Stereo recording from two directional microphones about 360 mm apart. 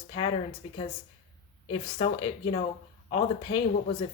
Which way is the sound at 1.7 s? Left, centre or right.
Centre.